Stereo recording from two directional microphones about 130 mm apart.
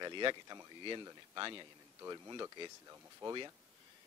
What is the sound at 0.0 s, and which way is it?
A man's voice, 35° right (ahead or behind).